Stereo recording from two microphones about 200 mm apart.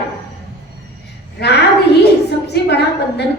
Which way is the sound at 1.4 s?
55° left (ahead or behind).